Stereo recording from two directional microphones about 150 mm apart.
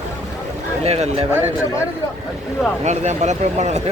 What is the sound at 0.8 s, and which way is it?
Speech, 45° right (ahead or behind).